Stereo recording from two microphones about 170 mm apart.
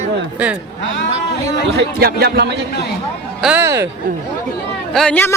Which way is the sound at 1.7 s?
70° right (ahead or behind).